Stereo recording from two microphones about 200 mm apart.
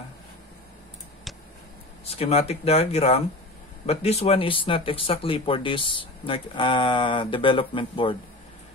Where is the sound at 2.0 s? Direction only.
30° left (ahead or behind).